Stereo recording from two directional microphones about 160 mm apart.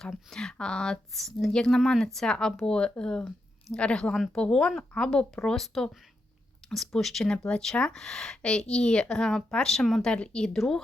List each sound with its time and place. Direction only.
0.0 s speech: centre (ahead or behind)